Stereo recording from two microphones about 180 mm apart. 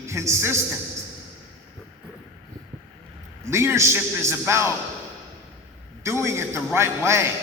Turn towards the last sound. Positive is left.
turn(degrees=-15)  # may be behind; listen again after turning